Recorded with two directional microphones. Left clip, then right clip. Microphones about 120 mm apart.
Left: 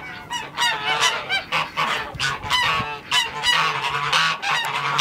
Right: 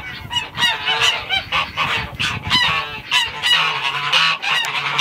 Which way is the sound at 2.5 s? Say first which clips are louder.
Right 4 dB; 15° left (ahead or behind).